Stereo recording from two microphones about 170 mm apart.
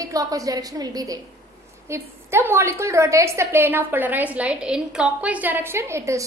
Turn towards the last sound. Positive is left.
turn(degrees=-15)  # may be behind; listen again after turning